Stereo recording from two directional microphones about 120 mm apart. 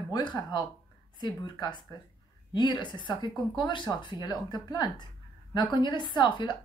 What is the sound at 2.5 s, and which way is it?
A woman's voice, 40° left (ahead or behind).